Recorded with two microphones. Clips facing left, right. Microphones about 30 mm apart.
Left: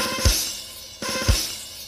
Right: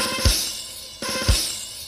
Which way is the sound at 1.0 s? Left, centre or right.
Centre.